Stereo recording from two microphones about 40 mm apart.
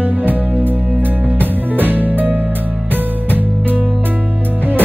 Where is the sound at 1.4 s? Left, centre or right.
Right.